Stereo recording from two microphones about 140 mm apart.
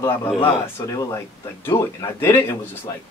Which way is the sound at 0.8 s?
25° left (ahead or behind).